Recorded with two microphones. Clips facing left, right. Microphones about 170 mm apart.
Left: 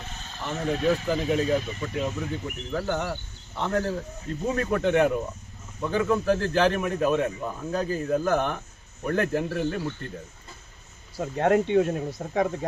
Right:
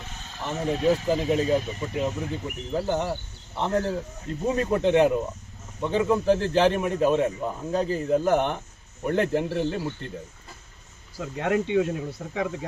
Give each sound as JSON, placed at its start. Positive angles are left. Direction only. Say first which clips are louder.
{"t": 0.5, "sound": "speech", "louder": "right 1 dB", "side_deg": -15}
{"t": 11.7, "sound": "speech", "louder": "left 2 dB", "side_deg": 40}